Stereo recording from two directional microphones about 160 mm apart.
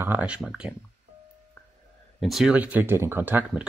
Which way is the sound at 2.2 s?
Centre (ahead or behind).